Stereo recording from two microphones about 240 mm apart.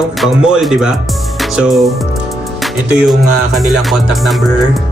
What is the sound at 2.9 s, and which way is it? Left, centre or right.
Music, centre.